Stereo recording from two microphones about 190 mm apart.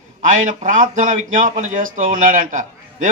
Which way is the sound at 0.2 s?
45° right (ahead or behind).